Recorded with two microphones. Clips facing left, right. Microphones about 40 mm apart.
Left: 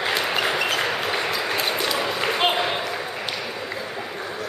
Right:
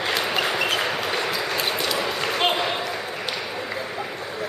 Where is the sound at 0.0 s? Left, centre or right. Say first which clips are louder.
Left 1 dB; centre.